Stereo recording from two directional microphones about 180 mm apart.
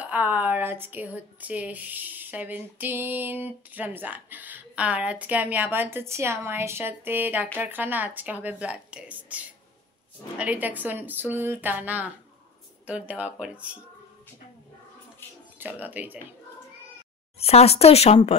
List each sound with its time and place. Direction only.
0.0 s speech: 10° right (ahead or behind)
15.6 s speech: 10° right (ahead or behind)
17.4 s speech: 35° left (ahead or behind)